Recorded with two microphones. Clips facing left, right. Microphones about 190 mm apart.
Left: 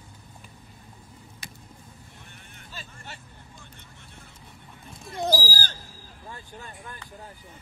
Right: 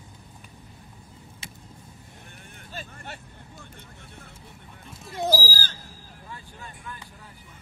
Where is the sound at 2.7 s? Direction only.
50° right (ahead or behind).